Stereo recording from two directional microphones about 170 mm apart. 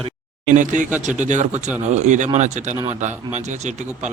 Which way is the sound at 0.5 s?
50° right (ahead or behind).